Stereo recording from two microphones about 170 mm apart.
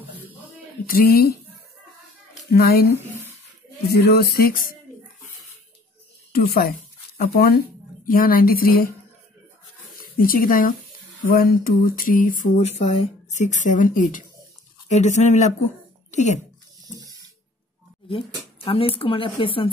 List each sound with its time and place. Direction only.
0.8 s speech: 60° left (ahead or behind)
2.5 s speech: 65° left (ahead or behind)
6.3 s speech: 65° left (ahead or behind)
8.0 s speech: 55° left (ahead or behind)
9.9 s speech: 55° left (ahead or behind)
11.2 s a sound: 55° left (ahead or behind)
16.1 s speech: 45° left (ahead or behind)
18.0 s speech: 30° left (ahead or behind)